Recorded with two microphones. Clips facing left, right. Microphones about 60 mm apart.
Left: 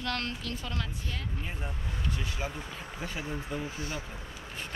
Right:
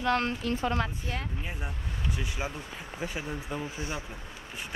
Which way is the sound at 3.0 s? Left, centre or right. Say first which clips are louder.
Right 2 dB; centre.